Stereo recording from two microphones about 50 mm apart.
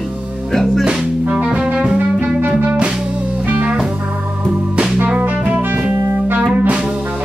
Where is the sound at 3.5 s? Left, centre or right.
Right.